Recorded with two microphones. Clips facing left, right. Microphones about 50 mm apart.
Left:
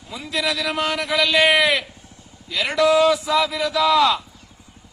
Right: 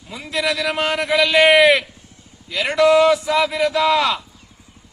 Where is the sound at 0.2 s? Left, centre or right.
Right.